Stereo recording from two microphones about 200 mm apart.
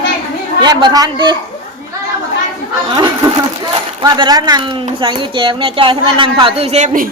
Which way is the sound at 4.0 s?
20° right (ahead or behind).